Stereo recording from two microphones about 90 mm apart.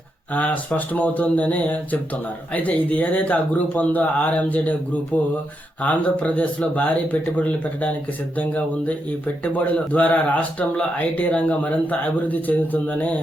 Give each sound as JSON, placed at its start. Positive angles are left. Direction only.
{"t": 0.3, "sound": "a man's voice", "side_deg": 15}